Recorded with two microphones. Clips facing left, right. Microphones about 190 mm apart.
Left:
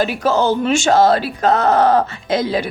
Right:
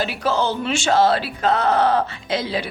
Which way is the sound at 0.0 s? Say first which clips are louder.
Left 5 dB; 45° left (ahead or behind).